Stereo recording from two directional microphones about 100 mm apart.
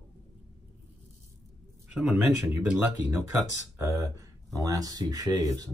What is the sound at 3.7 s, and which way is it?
Speech, 35° right (ahead or behind).